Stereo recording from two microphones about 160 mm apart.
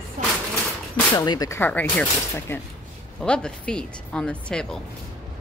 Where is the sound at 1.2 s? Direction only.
25° left (ahead or behind).